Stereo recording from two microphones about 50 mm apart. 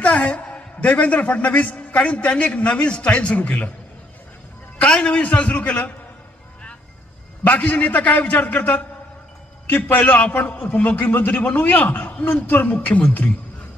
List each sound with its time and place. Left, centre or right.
0.0 s a man's voice: left
4.7 s a man's voice: left
7.4 s a man's voice: left